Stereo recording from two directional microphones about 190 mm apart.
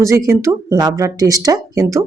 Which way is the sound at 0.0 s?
15° right (ahead or behind).